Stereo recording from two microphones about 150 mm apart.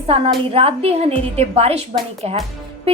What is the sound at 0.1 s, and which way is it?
A woman's voice, 40° right (ahead or behind).